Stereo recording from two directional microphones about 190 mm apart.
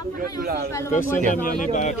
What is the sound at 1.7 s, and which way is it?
Speech, 40° left (ahead or behind).